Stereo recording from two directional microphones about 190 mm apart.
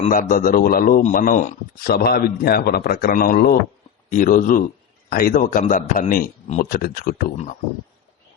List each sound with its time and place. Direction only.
0.1 s a man's voice: 45° left (ahead or behind)